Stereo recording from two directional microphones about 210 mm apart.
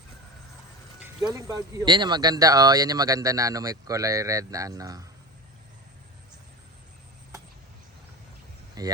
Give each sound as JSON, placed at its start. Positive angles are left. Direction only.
{"t": 1.0, "sound": "speech", "side_deg": -15}
{"t": 8.8, "sound": "speech", "side_deg": -20}